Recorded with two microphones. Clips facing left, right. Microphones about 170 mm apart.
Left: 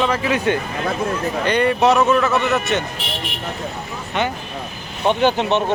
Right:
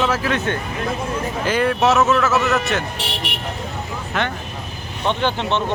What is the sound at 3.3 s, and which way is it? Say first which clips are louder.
Vehicle: right 1 dB; 75° right (ahead or behind).